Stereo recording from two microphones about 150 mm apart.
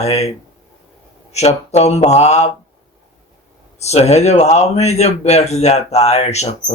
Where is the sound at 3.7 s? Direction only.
45° left (ahead or behind).